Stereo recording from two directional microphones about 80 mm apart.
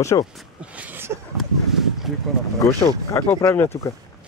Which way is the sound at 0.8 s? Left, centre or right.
Right.